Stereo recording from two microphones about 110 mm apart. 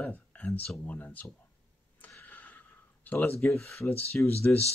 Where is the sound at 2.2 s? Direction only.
15° left (ahead or behind).